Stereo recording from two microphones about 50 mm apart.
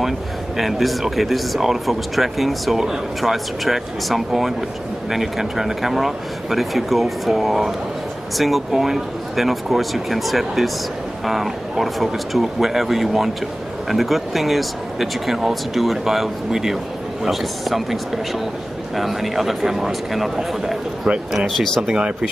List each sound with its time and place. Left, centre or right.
0.6 s speech: centre
21.5 s speech: centre
21.8 s speech: centre